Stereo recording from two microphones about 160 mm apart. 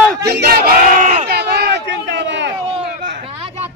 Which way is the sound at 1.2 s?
90° right.